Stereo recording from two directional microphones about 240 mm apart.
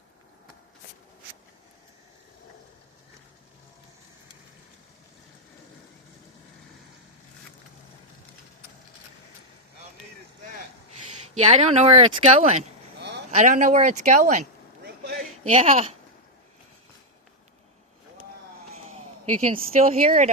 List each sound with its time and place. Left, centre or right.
11.3 s speech: right
13.0 s a sound: right
13.3 s speech: right
15.4 s speech: right
19.2 s speech: right